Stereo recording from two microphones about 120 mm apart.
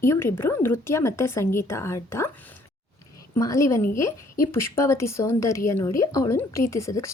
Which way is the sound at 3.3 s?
25° left (ahead or behind).